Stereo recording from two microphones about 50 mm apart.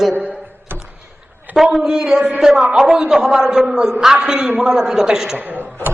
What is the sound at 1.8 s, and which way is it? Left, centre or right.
A man's voice, centre.